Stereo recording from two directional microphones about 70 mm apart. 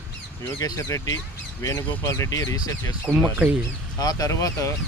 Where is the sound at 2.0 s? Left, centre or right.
Left.